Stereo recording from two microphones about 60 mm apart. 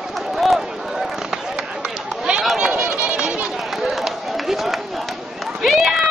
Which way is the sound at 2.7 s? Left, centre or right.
Right.